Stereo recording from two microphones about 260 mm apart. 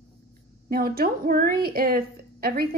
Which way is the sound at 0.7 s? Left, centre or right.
Right.